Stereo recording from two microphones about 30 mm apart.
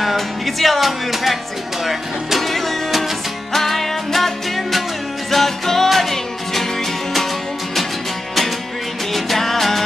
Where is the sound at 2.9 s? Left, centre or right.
Centre.